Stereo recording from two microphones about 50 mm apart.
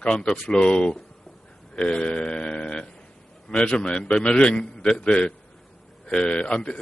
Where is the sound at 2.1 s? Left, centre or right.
Centre.